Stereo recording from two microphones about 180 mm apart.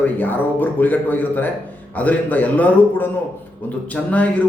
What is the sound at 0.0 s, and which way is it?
Speech, 10° left (ahead or behind).